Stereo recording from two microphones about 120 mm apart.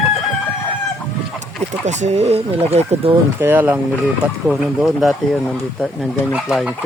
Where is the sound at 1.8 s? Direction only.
75° right (ahead or behind).